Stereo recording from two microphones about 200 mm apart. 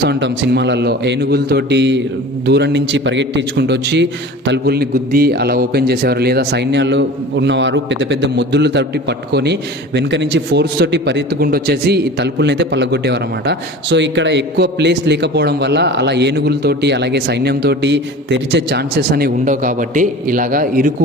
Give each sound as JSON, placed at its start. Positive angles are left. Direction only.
{"t": 0.0, "sound": "a man's voice", "side_deg": -60}